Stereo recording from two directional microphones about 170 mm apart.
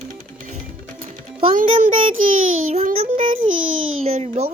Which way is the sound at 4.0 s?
40° right (ahead or behind).